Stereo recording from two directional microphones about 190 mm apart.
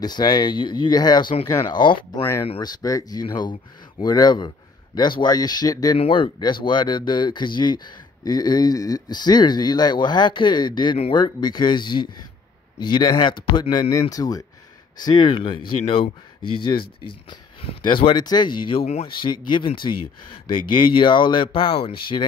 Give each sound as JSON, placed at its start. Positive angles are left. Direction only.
{"t": 0.0, "sound": "speech", "side_deg": 20}